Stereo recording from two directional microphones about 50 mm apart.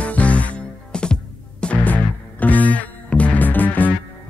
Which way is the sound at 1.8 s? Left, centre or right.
Left.